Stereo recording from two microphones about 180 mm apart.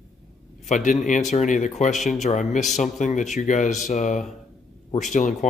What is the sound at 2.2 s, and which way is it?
Speech, 45° left (ahead or behind).